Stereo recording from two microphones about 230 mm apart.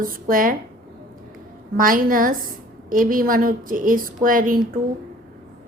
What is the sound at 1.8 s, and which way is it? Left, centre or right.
A woman's voice, right.